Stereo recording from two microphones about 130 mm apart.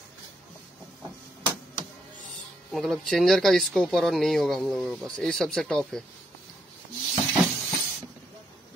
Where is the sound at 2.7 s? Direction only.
Centre (ahead or behind).